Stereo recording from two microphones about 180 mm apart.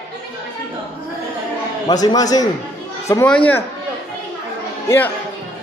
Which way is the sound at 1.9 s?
20° left (ahead or behind).